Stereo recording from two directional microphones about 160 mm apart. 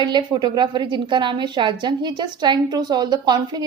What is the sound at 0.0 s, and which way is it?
A woman's voice, 25° right (ahead or behind).